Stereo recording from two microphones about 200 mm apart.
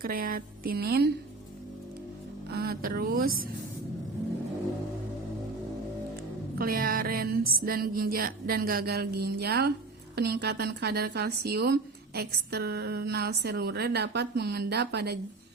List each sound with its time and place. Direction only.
0.0 s a woman's voice: 45° right (ahead or behind)
2.5 s a woman's voice: 50° right (ahead or behind)
6.6 s a woman's voice: 45° right (ahead or behind)